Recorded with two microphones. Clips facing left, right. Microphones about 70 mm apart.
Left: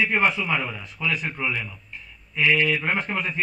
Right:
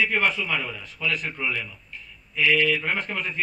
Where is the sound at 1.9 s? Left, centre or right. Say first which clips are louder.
Even; left.